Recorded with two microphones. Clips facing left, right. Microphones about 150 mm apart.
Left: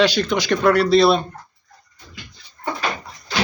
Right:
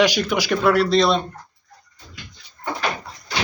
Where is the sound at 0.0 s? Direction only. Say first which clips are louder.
Left 1 dB; 10° right (ahead or behind); by 1.2 s 5° left (ahead or behind).